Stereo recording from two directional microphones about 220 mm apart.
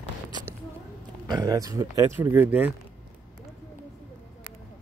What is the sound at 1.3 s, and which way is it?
Speech, 15° right (ahead or behind).